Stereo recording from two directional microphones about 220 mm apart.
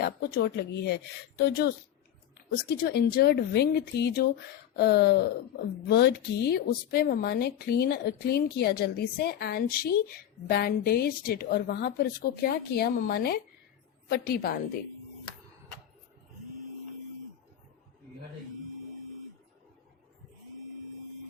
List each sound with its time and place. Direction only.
0.0 s speech: 45° left (ahead or behind)